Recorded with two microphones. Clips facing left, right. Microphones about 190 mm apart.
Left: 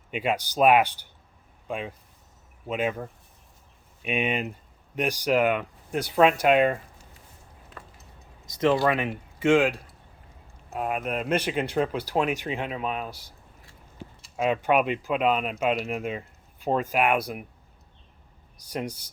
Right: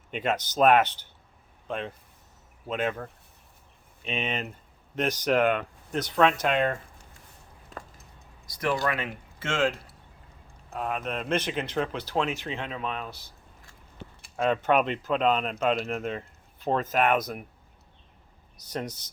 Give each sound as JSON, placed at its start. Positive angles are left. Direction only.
{"t": 0.1, "sound": "speech", "side_deg": 10}
{"t": 8.4, "sound": "speech", "side_deg": 20}
{"t": 14.3, "sound": "speech", "side_deg": 5}
{"t": 18.5, "sound": "speech", "side_deg": 10}